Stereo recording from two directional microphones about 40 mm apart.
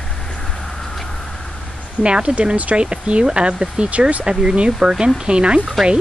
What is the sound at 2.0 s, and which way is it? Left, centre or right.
Speech, right.